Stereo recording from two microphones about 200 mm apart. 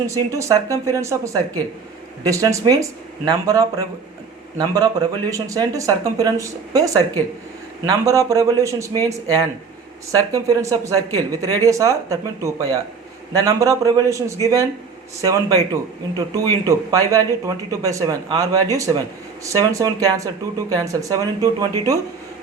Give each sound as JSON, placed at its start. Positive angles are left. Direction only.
{"t": 0.1, "sound": "a man's voice", "side_deg": -15}